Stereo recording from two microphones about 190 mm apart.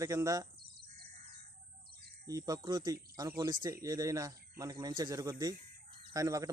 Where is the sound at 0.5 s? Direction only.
55° right (ahead or behind).